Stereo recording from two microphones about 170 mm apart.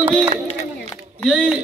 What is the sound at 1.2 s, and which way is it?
Speech, 5° right (ahead or behind).